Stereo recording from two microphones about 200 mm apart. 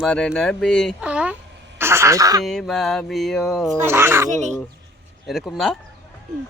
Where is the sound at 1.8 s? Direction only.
15° right (ahead or behind).